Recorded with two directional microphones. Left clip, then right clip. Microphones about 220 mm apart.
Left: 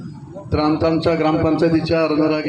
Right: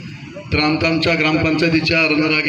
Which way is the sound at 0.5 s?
40° left (ahead or behind).